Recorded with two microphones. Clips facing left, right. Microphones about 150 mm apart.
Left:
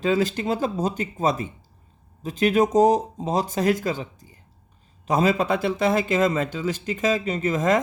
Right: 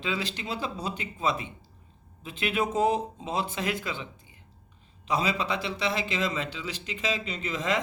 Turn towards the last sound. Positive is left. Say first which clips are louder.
# left 9 dB
turn(degrees=45)  # may be behind; listen again after turning